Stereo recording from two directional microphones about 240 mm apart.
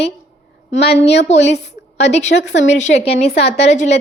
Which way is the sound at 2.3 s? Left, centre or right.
Left.